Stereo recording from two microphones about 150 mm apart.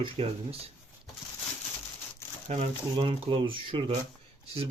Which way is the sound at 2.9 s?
35° right (ahead or behind).